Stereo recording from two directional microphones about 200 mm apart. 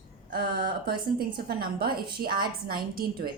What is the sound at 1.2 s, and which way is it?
A woman's voice, 50° right (ahead or behind).